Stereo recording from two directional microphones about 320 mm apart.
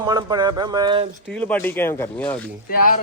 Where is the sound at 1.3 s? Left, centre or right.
Centre.